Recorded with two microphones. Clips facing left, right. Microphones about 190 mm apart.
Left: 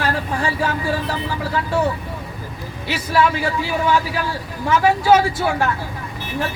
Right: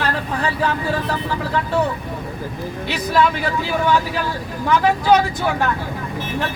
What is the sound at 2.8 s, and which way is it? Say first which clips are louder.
Speech: even; 10° left (ahead or behind).